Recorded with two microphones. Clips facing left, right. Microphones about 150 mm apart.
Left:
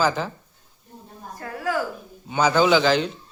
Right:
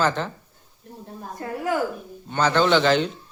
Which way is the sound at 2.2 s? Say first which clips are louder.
Left 1 dB; 5° left (ahead or behind).